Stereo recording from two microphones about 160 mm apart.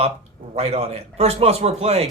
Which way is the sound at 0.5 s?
40° right (ahead or behind).